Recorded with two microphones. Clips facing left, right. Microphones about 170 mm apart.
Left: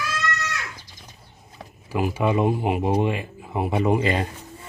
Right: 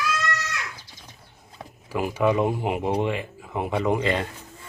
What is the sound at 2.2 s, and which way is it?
A man's voice, 20° left (ahead or behind).